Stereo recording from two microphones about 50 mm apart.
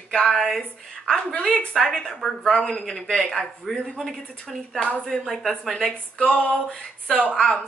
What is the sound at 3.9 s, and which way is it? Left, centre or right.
A woman's voice, centre.